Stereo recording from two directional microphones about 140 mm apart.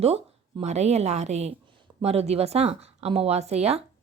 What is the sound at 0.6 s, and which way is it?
Speech, 50° right (ahead or behind).